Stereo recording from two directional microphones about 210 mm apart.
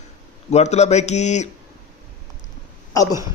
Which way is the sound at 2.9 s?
15° left (ahead or behind).